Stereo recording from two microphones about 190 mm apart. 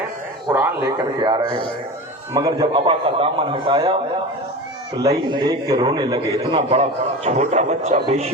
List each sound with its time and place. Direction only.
0.5 s speech: 10° right (ahead or behind)
2.3 s a man's voice: 20° right (ahead or behind)
4.9 s a man's voice: 20° right (ahead or behind)